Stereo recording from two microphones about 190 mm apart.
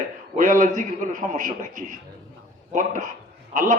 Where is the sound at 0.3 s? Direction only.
45° right (ahead or behind).